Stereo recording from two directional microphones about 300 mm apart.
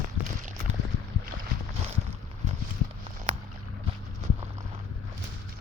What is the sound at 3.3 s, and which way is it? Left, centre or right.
Boat, right.